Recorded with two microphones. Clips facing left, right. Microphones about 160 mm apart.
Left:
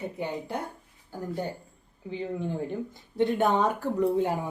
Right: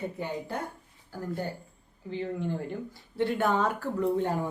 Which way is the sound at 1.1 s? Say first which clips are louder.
Left 1 dB; 15° left (ahead or behind).